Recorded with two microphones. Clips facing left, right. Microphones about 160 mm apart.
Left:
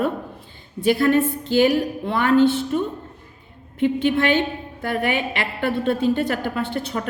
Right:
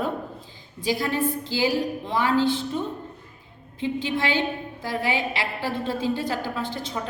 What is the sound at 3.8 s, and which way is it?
A woman's voice, 65° left (ahead or behind).